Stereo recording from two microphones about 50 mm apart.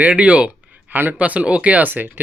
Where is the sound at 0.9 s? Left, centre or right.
Right.